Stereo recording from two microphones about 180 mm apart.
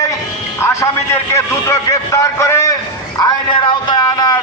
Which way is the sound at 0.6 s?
15° left (ahead or behind).